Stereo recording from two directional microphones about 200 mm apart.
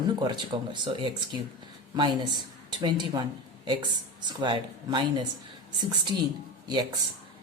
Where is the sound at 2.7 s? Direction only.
20° right (ahead or behind).